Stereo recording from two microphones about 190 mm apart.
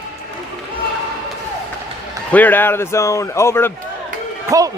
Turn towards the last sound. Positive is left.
turn(degrees=-20)  # may be behind; listen again after turning